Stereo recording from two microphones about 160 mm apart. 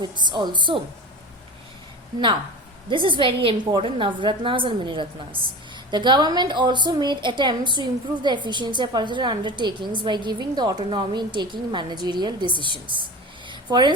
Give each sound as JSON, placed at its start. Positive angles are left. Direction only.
{"t": 0.0, "sound": "a woman's voice", "side_deg": -30}
{"t": 2.9, "sound": "a woman's voice", "side_deg": -30}
{"t": 13.5, "sound": "a sound", "side_deg": -30}